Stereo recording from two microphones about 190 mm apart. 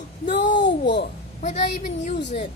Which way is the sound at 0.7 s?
65° left (ahead or behind).